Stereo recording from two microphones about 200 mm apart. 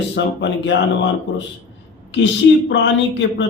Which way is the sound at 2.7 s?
60° left (ahead or behind).